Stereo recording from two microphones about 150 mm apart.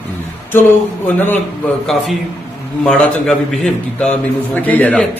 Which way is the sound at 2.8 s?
5° left (ahead or behind).